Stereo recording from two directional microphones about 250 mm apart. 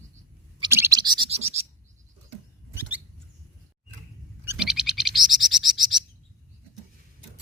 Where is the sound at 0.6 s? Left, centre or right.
Centre.